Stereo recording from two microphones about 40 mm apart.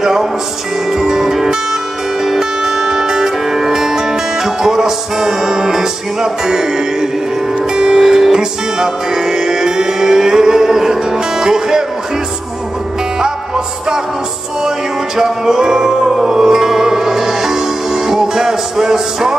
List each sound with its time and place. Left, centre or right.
0.0 s music: centre
15.1 s music: centre